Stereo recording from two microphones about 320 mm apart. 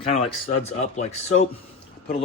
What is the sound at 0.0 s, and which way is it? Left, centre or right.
Speech, left.